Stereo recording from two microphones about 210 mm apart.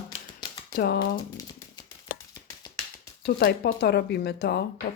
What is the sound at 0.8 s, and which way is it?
Speech, 50° left (ahead or behind).